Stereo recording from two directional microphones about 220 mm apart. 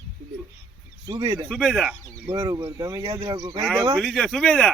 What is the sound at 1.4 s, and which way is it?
Speech, centre (ahead or behind).